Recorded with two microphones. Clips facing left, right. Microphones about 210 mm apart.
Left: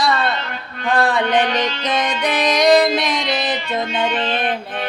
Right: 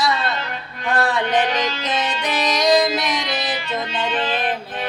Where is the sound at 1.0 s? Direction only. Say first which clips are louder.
Left 2 dB; 60° left (ahead or behind).